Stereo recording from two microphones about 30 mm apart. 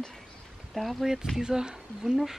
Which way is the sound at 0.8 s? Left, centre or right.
Centre.